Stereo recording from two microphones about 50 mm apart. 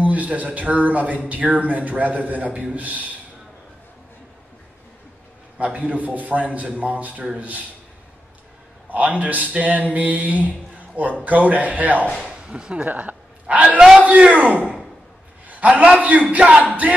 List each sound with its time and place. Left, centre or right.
0.0 s speech: right
5.6 s speech: right
8.9 s speech: right
12.2 s speech: centre
12.8 s a man's voice: right
13.7 s a man's voice: centre
14.0 s a man's voice: right